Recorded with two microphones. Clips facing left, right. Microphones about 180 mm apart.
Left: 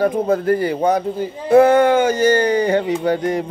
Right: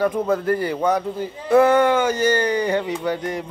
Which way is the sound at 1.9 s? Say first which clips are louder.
Left 4 dB; 15° left (ahead or behind).